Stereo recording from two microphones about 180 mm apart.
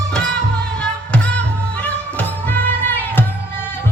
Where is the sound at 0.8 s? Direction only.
5° left (ahead or behind).